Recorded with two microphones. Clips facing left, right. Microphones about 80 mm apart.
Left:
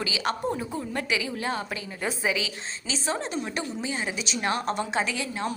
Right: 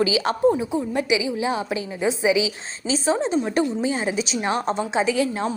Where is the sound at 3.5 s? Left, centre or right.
Right.